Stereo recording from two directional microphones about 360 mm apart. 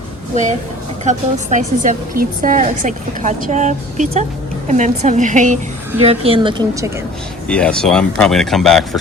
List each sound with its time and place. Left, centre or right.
1.0 s speech: centre
7.4 s speech: centre